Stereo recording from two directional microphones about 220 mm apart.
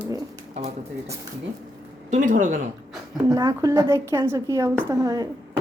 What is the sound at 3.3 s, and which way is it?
A woman's voice, 15° right (ahead or behind).